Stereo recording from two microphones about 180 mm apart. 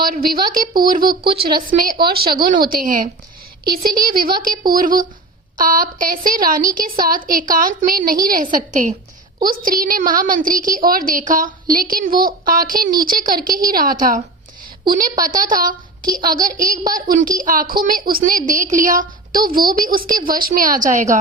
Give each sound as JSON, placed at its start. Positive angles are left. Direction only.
{"t": 0.0, "sound": "a woman's voice", "side_deg": -55}
{"t": 14.8, "sound": "a woman's voice", "side_deg": -20}
{"t": 15.3, "sound": "a woman's voice", "side_deg": -50}